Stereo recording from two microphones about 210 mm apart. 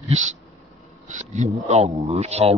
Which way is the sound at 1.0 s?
35° right (ahead or behind).